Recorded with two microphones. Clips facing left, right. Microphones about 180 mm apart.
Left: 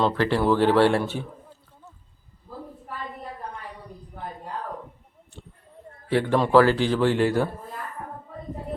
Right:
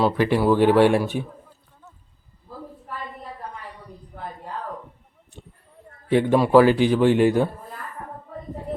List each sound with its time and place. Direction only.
0.0 s a man's voice: 15° right (ahead or behind)
6.1 s a man's voice: 15° right (ahead or behind)